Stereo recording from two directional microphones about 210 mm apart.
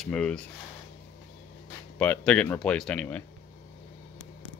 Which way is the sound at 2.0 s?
5° left (ahead or behind).